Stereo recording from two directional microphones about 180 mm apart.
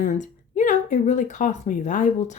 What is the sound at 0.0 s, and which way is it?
A woman's voice, 45° left (ahead or behind).